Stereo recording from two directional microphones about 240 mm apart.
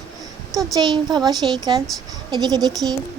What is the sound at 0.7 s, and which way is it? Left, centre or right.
A woman's voice, centre.